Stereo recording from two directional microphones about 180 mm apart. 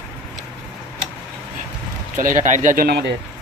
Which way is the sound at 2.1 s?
45° right (ahead or behind).